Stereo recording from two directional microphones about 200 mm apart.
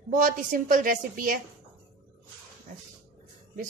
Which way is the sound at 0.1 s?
40° right (ahead or behind).